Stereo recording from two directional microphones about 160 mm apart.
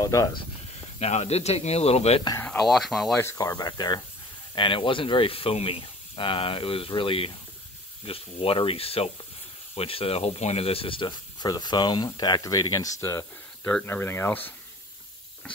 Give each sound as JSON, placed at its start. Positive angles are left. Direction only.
{"t": 0.0, "sound": "speech", "side_deg": 20}
{"t": 0.9, "sound": "speech", "side_deg": 40}
{"t": 2.4, "sound": "speech", "side_deg": 0}
{"t": 3.2, "sound": "speech", "side_deg": 20}
{"t": 13.7, "sound": "speech", "side_deg": 10}